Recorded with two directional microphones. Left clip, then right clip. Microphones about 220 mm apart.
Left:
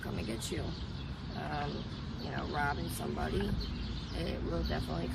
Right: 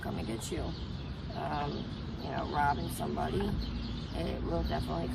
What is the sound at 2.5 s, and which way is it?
Speech, 15° right (ahead or behind).